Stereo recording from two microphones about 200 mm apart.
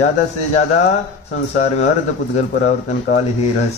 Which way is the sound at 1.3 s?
35° left (ahead or behind).